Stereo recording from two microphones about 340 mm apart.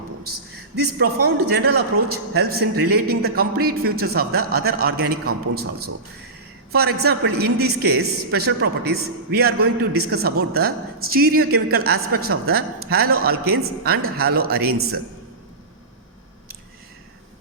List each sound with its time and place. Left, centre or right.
0.8 s a man's voice: right